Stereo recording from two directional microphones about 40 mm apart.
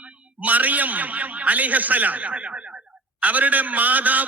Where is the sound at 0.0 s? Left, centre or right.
Right.